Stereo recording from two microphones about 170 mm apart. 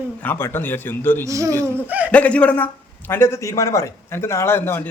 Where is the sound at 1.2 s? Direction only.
20° right (ahead or behind).